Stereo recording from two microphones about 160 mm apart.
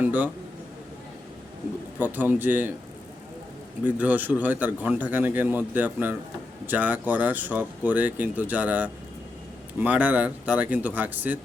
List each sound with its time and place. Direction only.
0.0 s a man's voice: 10° right (ahead or behind)
2.0 s speech: 10° right (ahead or behind)
3.8 s speech: 10° right (ahead or behind)